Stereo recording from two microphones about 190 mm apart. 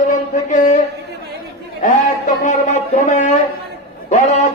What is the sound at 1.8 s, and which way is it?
A man's voice, 45° left (ahead or behind).